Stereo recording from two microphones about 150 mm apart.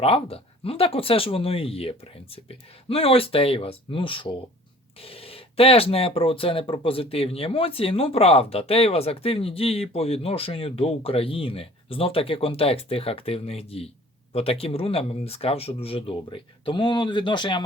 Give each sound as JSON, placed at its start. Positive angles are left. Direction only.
{"t": 0.0, "sound": "speech", "side_deg": 40}